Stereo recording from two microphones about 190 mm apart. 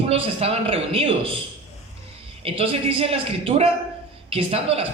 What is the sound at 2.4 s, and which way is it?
Speech, 30° right (ahead or behind).